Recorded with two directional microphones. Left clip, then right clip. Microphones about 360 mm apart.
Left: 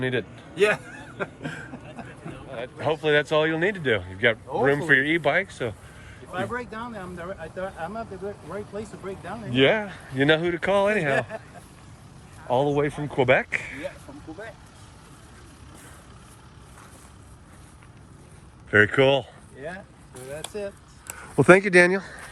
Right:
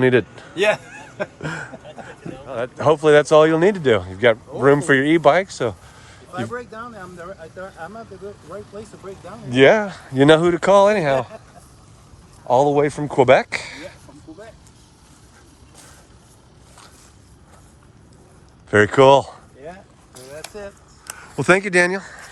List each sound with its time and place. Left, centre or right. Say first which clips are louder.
0.0 s a man's voice: right 11 dB; right
6.5 s speech: right 1 dB; left
9.0 s speech: left 1 dB; left
9.5 s speech: right 8 dB; centre
12.5 s speech: right 7 dB; centre
18.7 s speech: right 7 dB; centre
21.1 s speech: even; centre